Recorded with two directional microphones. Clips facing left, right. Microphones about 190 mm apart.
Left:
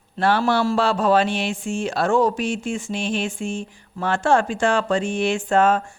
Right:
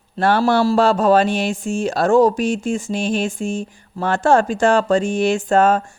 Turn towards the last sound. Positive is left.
turn(degrees=-40)  # may be behind; listen again after turning